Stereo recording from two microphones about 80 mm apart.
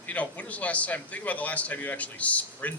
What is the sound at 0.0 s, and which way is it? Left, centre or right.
A man's voice, centre.